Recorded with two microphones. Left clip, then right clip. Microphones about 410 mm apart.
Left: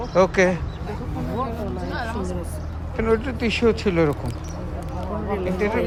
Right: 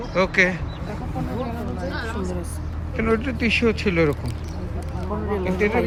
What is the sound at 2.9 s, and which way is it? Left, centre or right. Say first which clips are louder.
Speech: left 1 dB; centre.